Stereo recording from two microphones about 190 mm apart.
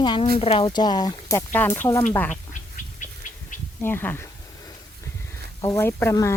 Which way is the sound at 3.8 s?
10° left (ahead or behind).